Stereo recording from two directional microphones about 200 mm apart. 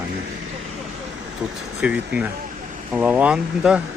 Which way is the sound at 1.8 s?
5° right (ahead or behind).